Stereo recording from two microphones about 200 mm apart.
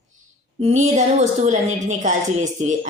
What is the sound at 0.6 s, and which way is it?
A woman's voice, 35° right (ahead or behind).